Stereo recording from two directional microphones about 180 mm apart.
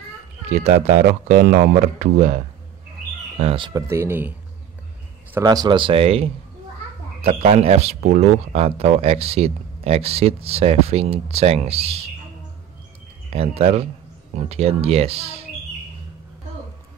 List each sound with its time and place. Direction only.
0.5 s speech: 40° right (ahead or behind)
1.0 s speech: 50° right (ahead or behind)
3.3 s speech: 30° right (ahead or behind)
3.9 s speech: 15° right (ahead or behind); by 12.1 s 35° right (ahead or behind)
13.3 s speech: 35° right (ahead or behind)